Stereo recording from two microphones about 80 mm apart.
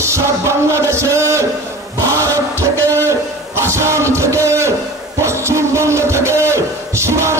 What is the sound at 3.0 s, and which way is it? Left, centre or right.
Music, right.